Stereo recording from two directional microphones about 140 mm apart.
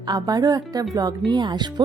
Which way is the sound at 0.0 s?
30° right (ahead or behind).